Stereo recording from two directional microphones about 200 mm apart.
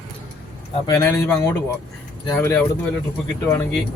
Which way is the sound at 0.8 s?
15° left (ahead or behind).